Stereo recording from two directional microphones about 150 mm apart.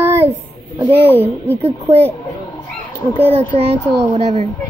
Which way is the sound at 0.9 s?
15° left (ahead or behind).